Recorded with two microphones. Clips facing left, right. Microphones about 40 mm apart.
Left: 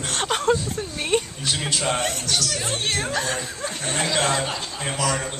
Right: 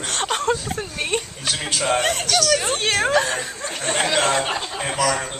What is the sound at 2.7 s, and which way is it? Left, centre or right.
Speech, right.